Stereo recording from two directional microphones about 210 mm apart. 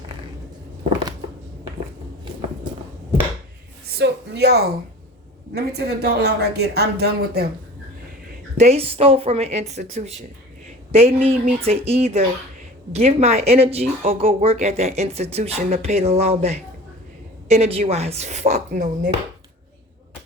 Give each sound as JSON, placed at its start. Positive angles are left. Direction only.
{"t": 3.8, "sound": "speech", "side_deg": -50}
{"t": 8.5, "sound": "a woman's voice", "side_deg": -30}